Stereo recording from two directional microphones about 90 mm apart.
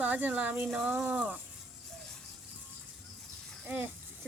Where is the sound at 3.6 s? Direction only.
15° right (ahead or behind).